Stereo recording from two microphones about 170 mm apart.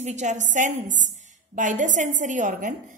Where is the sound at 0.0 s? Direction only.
45° right (ahead or behind).